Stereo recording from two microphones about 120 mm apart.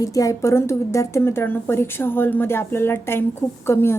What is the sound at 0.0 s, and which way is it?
A woman's voice, 30° left (ahead or behind).